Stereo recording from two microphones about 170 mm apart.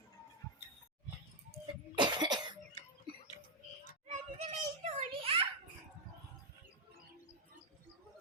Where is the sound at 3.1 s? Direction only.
30° right (ahead or behind).